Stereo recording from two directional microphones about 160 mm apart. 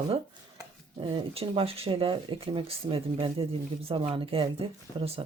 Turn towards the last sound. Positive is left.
turn(degrees=-35)  # may be behind; listen again after turning